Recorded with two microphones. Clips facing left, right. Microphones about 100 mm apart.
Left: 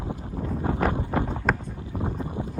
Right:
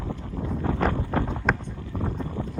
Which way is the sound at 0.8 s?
10° left (ahead or behind).